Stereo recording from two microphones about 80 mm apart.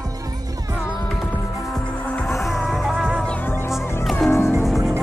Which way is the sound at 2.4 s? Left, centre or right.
Centre.